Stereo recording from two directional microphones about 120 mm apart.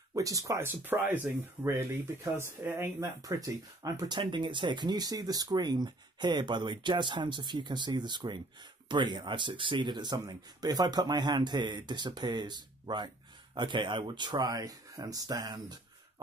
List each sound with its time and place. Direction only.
0.1 s speech: 30° right (ahead or behind)
1.6 s speech: 25° right (ahead or behind)